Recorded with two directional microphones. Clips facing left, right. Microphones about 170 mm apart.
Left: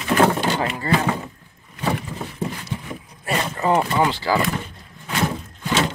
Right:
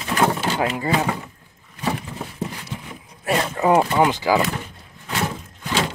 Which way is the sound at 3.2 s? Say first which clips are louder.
Right 3 dB; 5° right (ahead or behind).